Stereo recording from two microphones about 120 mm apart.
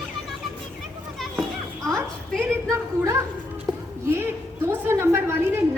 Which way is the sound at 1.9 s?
5° left (ahead or behind).